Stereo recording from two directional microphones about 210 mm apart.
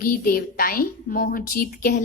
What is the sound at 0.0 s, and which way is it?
A woman's voice, 45° left (ahead or behind).